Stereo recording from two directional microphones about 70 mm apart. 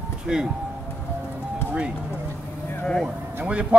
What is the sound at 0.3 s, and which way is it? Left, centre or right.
Speech, centre.